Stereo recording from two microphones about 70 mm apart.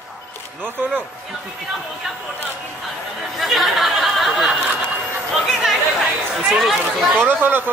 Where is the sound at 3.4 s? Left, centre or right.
Centre.